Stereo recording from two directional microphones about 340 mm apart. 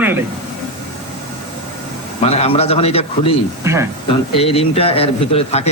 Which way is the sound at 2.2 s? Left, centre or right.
Centre.